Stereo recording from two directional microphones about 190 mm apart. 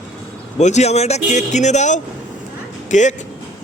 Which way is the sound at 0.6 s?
35° left (ahead or behind).